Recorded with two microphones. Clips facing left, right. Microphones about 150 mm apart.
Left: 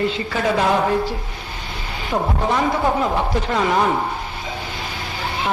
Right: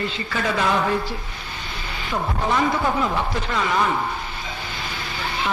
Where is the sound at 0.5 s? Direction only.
30° left (ahead or behind).